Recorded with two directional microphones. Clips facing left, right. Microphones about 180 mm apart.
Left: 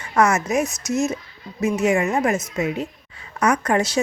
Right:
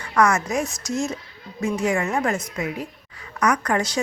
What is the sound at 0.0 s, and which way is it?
A woman's voice, 25° left (ahead or behind).